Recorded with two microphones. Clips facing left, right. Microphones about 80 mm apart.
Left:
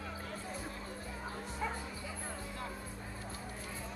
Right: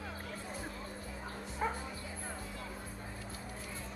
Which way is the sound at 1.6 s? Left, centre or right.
Right.